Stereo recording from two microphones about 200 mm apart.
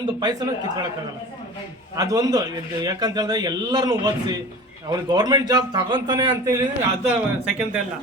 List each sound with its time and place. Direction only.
0.0 s a man's voice: 20° right (ahead or behind)
2.0 s a man's voice: 20° right (ahead or behind)
7.0 s speech: 5° right (ahead or behind)